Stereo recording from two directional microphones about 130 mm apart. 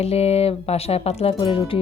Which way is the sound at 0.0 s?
50° left (ahead or behind).